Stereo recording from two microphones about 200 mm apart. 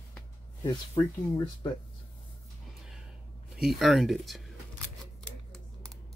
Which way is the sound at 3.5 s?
Centre (ahead or behind).